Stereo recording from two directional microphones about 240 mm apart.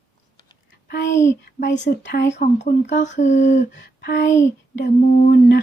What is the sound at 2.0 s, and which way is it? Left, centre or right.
Speech, left.